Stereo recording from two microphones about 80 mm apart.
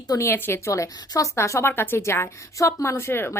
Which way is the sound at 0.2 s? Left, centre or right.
Left.